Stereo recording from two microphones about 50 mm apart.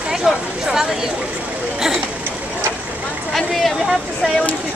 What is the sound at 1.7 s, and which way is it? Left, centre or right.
Chatter, centre.